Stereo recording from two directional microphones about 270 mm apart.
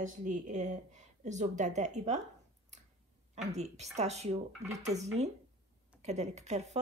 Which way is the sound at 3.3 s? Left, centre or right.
Right.